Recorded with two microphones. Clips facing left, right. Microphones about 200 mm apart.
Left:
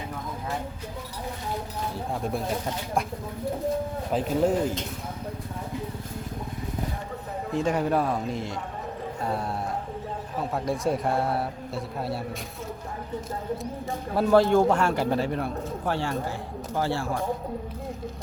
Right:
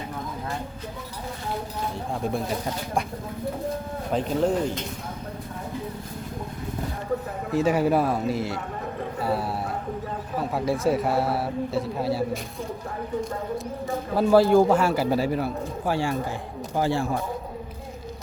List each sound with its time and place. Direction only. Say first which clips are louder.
4.1 s speech: right 1 dB; 5° left (ahead or behind)
7.5 s a man's voice: right 3 dB; 5° right (ahead or behind)
10.5 s a man's voice: right 3 dB; 5° right (ahead or behind)
14.2 s a man's voice: right 2 dB; 5° right (ahead or behind)